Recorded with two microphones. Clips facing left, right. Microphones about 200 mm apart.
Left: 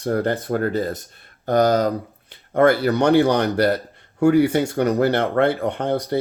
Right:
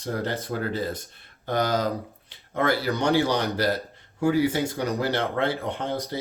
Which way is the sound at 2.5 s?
55° left (ahead or behind).